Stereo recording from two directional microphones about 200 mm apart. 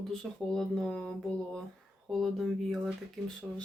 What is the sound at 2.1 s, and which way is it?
Speech, centre (ahead or behind).